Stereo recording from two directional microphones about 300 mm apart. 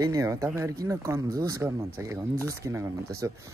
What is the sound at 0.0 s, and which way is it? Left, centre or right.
Speech, centre.